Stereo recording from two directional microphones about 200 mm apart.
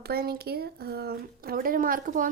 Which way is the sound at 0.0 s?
50° right (ahead or behind).